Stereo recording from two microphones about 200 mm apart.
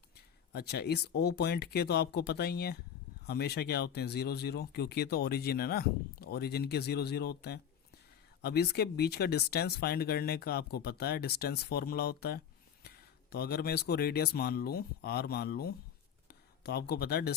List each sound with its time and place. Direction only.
0.5 s speech: 55° left (ahead or behind)